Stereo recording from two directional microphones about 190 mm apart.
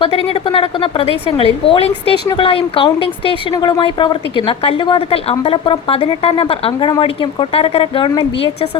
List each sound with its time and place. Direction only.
0.0 s a woman's voice: 30° left (ahead or behind)